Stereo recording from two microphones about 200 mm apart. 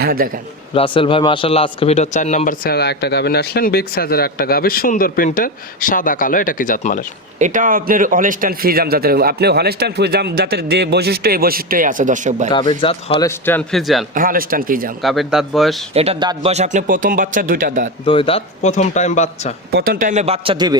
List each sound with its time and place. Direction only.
0.0 s a man's voice: 50° right (ahead or behind)
0.7 s a man's voice: 25° left (ahead or behind); by 7.0 s 40° left (ahead or behind)
7.3 s a man's voice: 40° right (ahead or behind)
12.5 s speech: 25° left (ahead or behind)
13.1 s speech: 10° left (ahead or behind)
14.2 s a man's voice: 45° right (ahead or behind)
15.0 s speech: centre (ahead or behind)
16.0 s a man's voice: 30° right (ahead or behind)
18.0 s a man's voice: 25° left (ahead or behind)
19.7 s a man's voice: 45° right (ahead or behind); by 20.7 s 25° right (ahead or behind)